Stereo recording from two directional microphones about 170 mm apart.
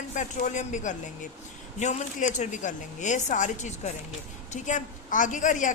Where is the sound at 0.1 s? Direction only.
45° left (ahead or behind).